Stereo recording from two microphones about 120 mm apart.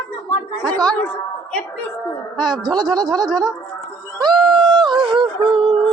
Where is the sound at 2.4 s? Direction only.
35° right (ahead or behind).